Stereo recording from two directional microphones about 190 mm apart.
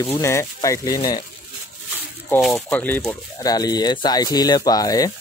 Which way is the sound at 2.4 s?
5° left (ahead or behind).